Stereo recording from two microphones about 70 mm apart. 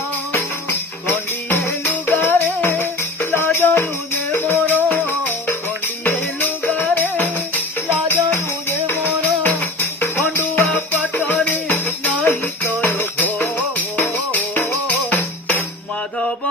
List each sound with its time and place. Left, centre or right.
0.3 s music: left
6.7 s music: left